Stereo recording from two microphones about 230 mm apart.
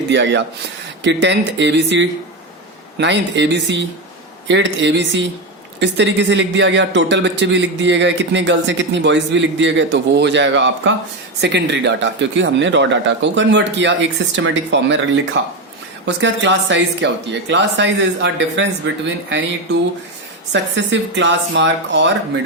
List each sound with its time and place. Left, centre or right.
0.1 s speech: right
16.2 s speech: right
20.5 s speech: right